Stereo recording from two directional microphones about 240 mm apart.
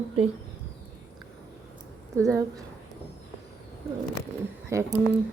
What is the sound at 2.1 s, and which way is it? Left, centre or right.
Speech, centre.